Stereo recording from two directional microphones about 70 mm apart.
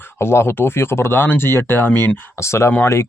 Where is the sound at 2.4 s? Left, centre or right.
Left.